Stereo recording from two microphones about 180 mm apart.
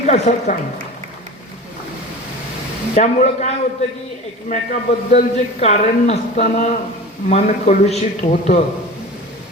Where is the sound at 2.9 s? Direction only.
40° left (ahead or behind).